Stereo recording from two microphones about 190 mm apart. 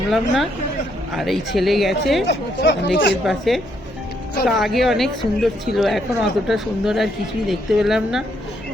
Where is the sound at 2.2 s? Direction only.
65° left (ahead or behind).